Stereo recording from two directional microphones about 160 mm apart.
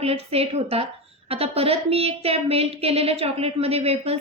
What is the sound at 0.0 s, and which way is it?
Speech, 40° right (ahead or behind).